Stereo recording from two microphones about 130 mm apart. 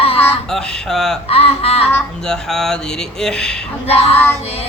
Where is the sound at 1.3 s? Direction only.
50° left (ahead or behind).